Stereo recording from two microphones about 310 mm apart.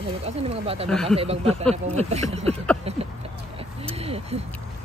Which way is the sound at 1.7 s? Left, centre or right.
Right.